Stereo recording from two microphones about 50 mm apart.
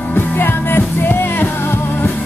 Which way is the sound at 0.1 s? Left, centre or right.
Left.